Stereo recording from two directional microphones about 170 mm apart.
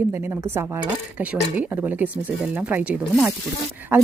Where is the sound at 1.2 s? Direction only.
10° right (ahead or behind).